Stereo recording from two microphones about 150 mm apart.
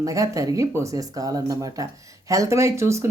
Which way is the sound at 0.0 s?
20° right (ahead or behind).